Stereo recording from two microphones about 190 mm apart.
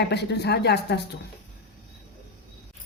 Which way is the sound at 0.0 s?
60° left (ahead or behind).